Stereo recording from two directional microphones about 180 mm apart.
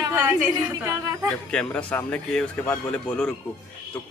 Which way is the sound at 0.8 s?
20° right (ahead or behind).